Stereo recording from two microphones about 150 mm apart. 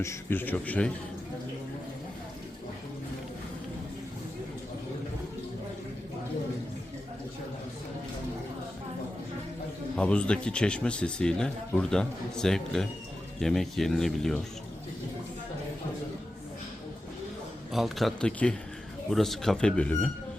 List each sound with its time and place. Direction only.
0.0 s a man's voice: 15° left (ahead or behind)
10.0 s a man's voice: 5° left (ahead or behind)
17.7 s speech: centre (ahead or behind)